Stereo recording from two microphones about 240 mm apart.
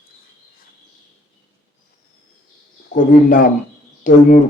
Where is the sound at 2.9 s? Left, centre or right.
Left.